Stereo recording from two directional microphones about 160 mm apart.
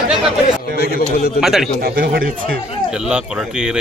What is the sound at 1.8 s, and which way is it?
Speech, 65° right (ahead or behind).